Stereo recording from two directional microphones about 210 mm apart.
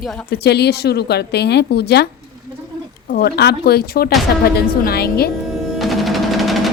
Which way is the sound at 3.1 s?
50° left (ahead or behind).